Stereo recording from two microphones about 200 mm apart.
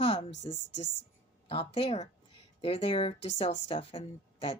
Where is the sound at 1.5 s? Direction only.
30° left (ahead or behind).